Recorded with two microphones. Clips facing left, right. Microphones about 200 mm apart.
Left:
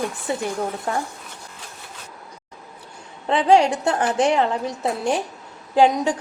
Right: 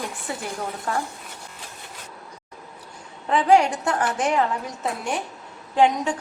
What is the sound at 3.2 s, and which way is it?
A woman's voice, 25° left (ahead or behind).